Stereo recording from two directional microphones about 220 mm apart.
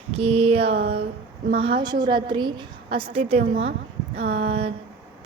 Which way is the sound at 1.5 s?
25° right (ahead or behind).